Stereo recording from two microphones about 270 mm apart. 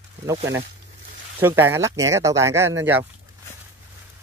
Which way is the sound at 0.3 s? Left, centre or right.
Centre.